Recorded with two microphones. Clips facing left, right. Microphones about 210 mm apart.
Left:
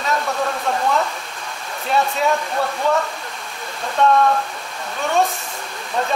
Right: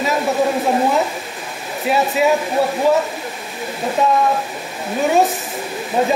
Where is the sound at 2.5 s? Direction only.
25° right (ahead or behind).